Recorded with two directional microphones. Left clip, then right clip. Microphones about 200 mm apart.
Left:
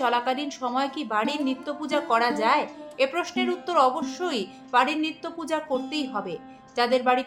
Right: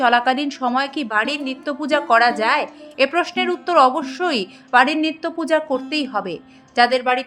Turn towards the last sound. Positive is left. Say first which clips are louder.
# right 6 dB
turn(degrees=-30)  # may be behind; listen again after turning